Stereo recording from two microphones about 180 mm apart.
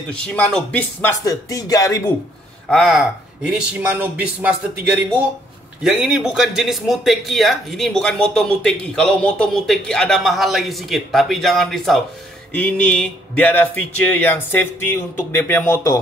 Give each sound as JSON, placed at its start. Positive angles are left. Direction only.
{"t": 0.1, "sound": "speech", "side_deg": 5}
{"t": 2.7, "sound": "a man's voice", "side_deg": 0}